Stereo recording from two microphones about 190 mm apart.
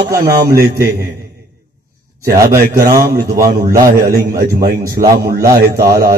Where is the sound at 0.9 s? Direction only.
55° right (ahead or behind).